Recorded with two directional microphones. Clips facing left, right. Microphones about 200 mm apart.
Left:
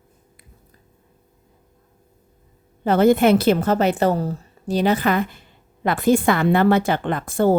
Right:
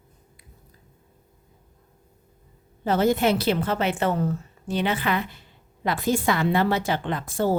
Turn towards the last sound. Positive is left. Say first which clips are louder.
# left 6 dB
turn(degrees=55)  # may be behind; listen again after turning